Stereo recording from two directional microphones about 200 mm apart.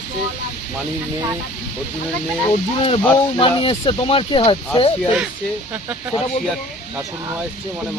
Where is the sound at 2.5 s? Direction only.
30° left (ahead or behind).